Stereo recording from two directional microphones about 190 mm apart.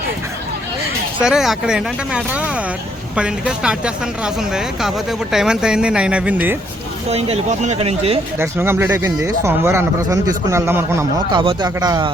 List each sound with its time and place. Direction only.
1.2 s a woman's voice: centre (ahead or behind)
7.1 s speech: 35° right (ahead or behind)
8.4 s speech: 10° right (ahead or behind)
11.3 s speech: 25° right (ahead or behind)